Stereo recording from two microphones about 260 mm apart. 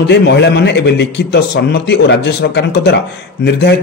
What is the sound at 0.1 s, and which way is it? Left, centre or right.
Speech, left.